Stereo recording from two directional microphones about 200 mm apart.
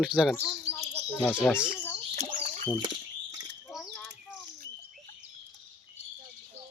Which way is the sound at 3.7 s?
Centre (ahead or behind).